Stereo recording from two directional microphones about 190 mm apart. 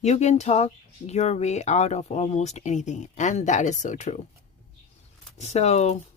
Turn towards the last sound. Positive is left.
turn(degrees=35)  # may be behind; listen again after turning